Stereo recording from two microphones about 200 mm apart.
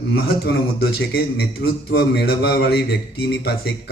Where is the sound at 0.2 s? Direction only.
55° left (ahead or behind).